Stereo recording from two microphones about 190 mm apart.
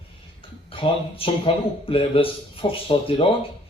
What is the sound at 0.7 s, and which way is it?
A man's voice, 30° left (ahead or behind).